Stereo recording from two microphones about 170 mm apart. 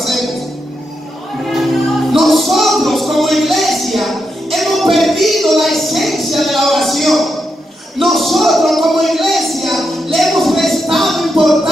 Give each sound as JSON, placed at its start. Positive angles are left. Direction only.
{"t": 0.0, "sound": "music", "side_deg": 0}
{"t": 1.5, "sound": "music", "side_deg": 0}
{"t": 8.0, "sound": "a sound", "side_deg": 0}